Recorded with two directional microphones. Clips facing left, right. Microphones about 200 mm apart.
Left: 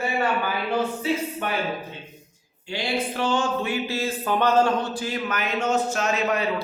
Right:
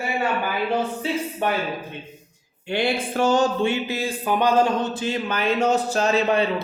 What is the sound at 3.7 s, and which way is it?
Speech, 15° right (ahead or behind).